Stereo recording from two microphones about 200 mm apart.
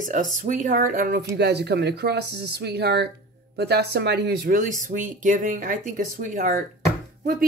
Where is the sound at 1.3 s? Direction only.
55° right (ahead or behind).